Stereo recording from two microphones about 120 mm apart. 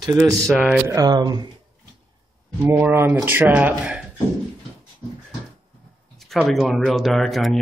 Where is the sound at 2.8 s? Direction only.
20° right (ahead or behind).